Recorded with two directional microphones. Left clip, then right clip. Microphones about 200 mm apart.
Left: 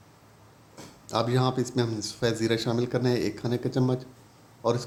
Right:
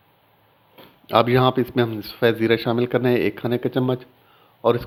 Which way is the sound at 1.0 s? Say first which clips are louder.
Right 10 dB; 30° right (ahead or behind).